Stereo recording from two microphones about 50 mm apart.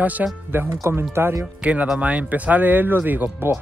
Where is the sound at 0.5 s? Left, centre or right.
Right.